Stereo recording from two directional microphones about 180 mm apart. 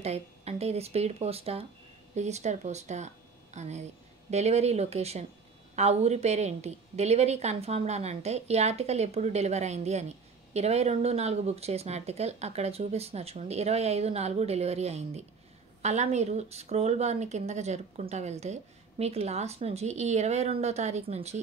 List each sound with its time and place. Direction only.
0.0 s a woman's voice: 35° right (ahead or behind)